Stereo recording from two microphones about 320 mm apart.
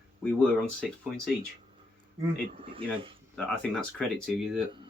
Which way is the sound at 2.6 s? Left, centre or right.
Centre.